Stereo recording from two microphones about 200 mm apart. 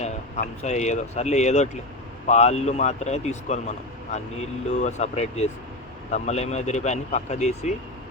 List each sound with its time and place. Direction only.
0.0 s speech: 35° left (ahead or behind)
4.8 s speech: 35° left (ahead or behind)